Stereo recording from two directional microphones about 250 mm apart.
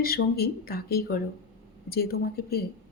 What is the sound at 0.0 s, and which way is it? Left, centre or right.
A woman's voice, left.